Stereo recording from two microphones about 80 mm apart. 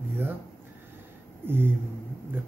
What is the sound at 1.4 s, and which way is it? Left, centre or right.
Speech, right.